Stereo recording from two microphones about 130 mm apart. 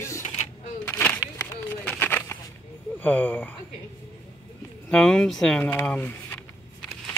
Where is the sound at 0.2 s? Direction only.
60° left (ahead or behind).